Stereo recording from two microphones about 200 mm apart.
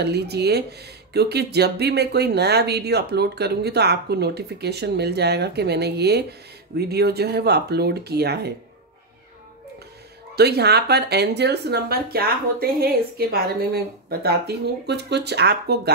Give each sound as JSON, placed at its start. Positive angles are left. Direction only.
{"t": 0.0, "sound": "speech", "side_deg": -55}
{"t": 10.3, "sound": "speech", "side_deg": -55}